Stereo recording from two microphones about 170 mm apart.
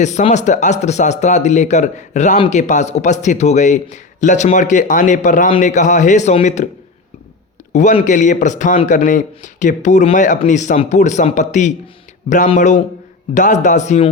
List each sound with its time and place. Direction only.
0.0 s speech: 45° left (ahead or behind)
7.7 s speech: 45° left (ahead or behind)